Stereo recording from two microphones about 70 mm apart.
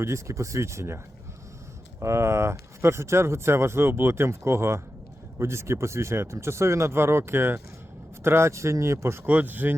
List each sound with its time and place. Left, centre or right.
0.0 s speech: right
9.2 s speech: right